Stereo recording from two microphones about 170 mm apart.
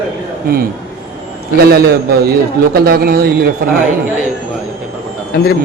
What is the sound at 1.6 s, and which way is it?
A man's voice, 70° right (ahead or behind).